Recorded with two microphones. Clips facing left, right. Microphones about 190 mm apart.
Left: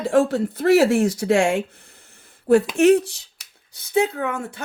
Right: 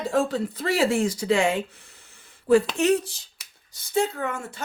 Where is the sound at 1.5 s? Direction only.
55° left (ahead or behind).